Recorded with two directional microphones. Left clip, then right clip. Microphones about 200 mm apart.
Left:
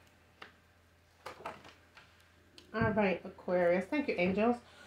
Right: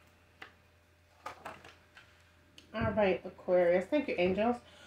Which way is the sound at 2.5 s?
30° left (ahead or behind).